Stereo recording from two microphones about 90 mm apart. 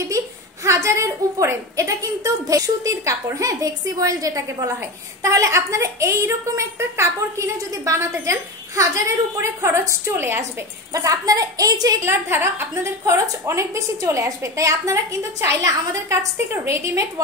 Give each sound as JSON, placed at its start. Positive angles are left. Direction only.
{"t": 0.7, "sound": "a woman's voice", "side_deg": -35}
{"t": 10.9, "sound": "a woman's voice", "side_deg": -40}
{"t": 12.0, "sound": "a woman's voice", "side_deg": -25}